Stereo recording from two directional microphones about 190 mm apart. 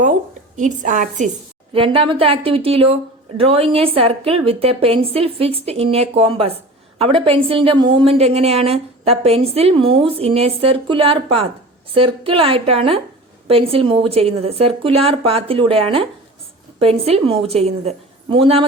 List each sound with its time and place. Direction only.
0.0 s speech: 40° right (ahead or behind)
1.7 s a woman's voice: 30° right (ahead or behind)